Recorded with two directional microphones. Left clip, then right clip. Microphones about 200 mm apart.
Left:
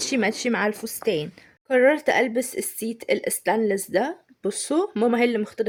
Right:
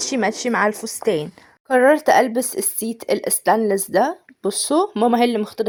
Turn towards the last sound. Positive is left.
turn(degrees=-10)  # may be behind; listen again after turning